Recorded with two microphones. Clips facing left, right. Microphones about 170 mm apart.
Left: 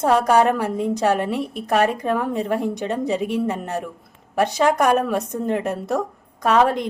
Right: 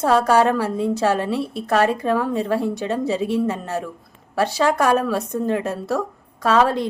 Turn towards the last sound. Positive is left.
turn(degrees=15)  # may be behind; listen again after turning